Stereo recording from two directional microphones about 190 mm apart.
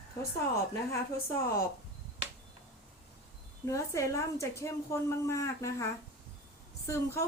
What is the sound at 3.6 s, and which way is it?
Speech, 15° left (ahead or behind).